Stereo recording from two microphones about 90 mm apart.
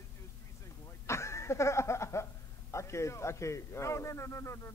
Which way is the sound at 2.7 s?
30° left (ahead or behind).